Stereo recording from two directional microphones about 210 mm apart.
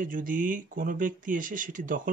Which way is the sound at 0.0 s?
40° right (ahead or behind).